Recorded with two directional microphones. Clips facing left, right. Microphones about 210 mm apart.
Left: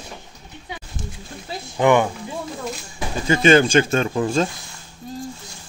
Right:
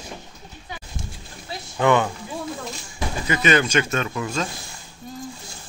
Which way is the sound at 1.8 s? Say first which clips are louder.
Left 3 dB; 15° left (ahead or behind).